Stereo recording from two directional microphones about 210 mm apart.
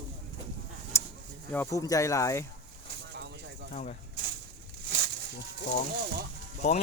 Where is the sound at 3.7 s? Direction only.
35° left (ahead or behind).